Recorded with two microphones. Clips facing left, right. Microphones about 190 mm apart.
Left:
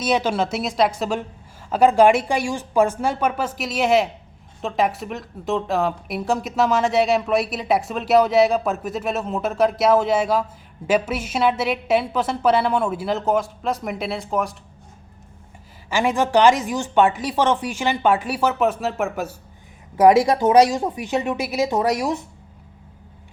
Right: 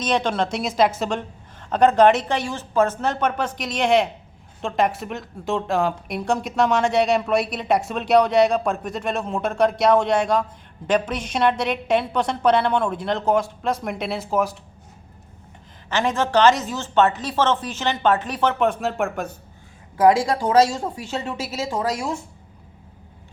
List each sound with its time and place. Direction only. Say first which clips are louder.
0.0 s speech: left 1 dB; 5° left (ahead or behind)
15.9 s speech: left 2 dB; 10° left (ahead or behind)
20.0 s speech: left 3 dB; 20° left (ahead or behind)